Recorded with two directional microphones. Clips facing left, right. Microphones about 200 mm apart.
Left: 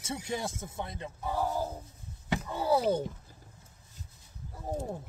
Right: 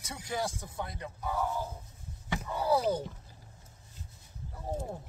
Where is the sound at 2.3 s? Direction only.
25° left (ahead or behind).